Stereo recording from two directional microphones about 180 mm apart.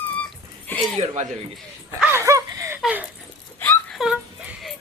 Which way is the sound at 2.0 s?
15° right (ahead or behind).